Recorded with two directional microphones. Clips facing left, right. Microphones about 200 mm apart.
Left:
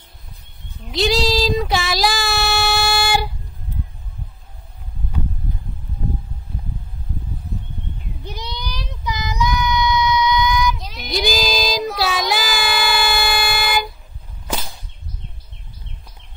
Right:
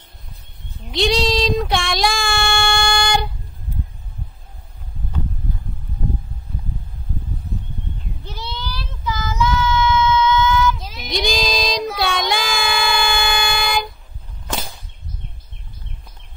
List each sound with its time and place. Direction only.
0.8 s child singing: centre (ahead or behind)
8.2 s child singing: 15° left (ahead or behind)
10.8 s child singing: centre (ahead or behind)